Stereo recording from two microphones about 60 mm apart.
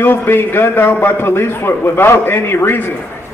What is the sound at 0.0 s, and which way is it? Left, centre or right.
A man's voice, left.